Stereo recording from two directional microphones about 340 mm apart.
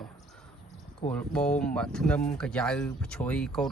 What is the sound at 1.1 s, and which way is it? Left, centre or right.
Speech, centre.